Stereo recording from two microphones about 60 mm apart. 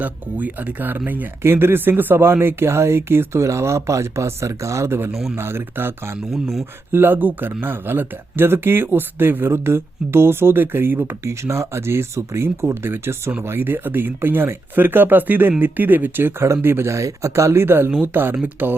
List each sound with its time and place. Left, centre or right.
0.0 s speech: right
3.4 s speech: right
5.4 s speech: right
6.3 s speech: centre
6.9 s speech: right
11.2 s speech: right